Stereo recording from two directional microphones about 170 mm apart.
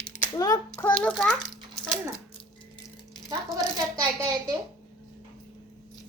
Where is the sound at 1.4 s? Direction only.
Centre (ahead or behind).